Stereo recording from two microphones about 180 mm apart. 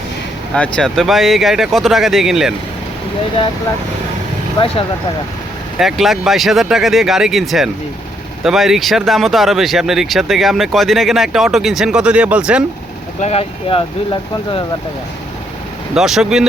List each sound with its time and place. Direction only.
0.5 s speech: 5° left (ahead or behind)
5.8 s speech: centre (ahead or behind)
13.1 s speech: 35° left (ahead or behind)
16.0 s speech: centre (ahead or behind)